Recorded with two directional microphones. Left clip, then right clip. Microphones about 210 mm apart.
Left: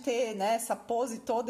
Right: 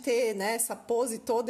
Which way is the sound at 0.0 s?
40° right (ahead or behind).